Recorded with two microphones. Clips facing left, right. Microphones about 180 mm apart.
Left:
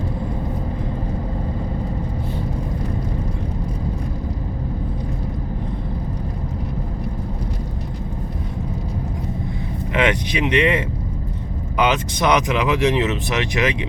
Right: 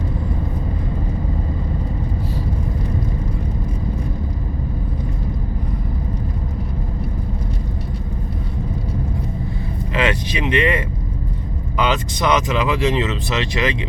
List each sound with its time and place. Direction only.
9.9 s speech: 20° left (ahead or behind)